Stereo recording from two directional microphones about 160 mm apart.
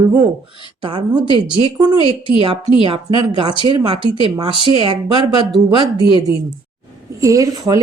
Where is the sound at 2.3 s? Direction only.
40° right (ahead or behind).